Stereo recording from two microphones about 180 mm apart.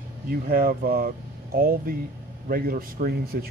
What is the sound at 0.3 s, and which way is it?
Speech, 55° right (ahead or behind).